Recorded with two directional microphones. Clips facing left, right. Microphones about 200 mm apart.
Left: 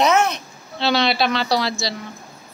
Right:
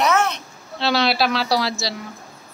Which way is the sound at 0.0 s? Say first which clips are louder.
Left 2 dB; 20° left (ahead or behind).